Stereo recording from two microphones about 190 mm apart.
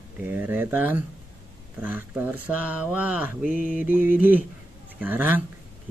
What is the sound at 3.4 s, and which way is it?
Mantra, 45° left (ahead or behind).